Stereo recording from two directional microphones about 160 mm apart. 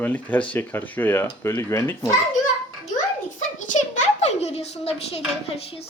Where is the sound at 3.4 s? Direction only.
50° left (ahead or behind).